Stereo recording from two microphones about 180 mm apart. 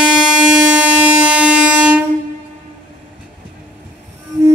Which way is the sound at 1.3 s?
5° right (ahead or behind).